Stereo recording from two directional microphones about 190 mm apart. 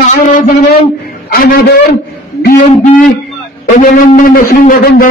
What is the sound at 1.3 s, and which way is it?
Speech, 50° left (ahead or behind).